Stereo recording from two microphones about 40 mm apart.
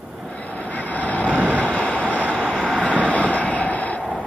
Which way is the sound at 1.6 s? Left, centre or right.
Left.